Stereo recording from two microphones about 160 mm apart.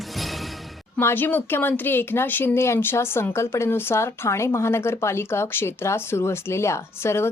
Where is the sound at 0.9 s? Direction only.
15° left (ahead or behind).